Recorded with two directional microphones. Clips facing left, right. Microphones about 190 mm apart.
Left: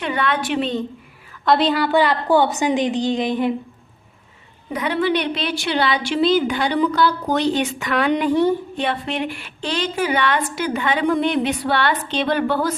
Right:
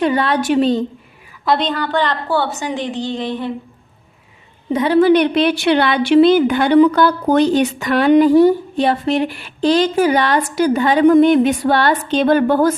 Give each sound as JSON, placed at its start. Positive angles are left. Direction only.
{"t": 0.0, "sound": "a woman's voice", "side_deg": -35}
{"t": 1.5, "sound": "a woman's voice", "side_deg": 5}
{"t": 4.7, "sound": "a woman's voice", "side_deg": -30}
{"t": 4.9, "sound": "a woman's voice", "side_deg": -45}